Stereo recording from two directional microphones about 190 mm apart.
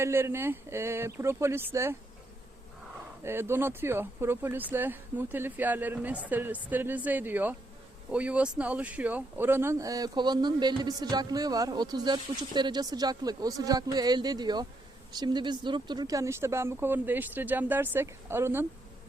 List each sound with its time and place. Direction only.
0.0 s speech: 15° right (ahead or behind)
3.2 s speech: 15° right (ahead or behind)